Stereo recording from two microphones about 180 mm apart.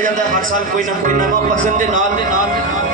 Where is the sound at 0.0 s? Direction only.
45° right (ahead or behind).